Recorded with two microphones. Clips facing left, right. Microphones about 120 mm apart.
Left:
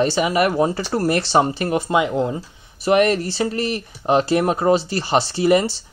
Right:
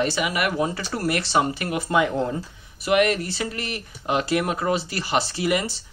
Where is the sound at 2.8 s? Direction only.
35° left (ahead or behind).